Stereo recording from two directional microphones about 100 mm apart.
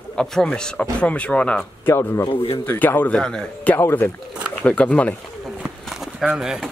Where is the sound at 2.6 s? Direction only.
20° left (ahead or behind).